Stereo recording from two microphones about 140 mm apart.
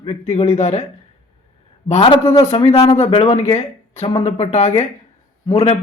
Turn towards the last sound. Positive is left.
turn(degrees=50)  # may be behind; listen again after turning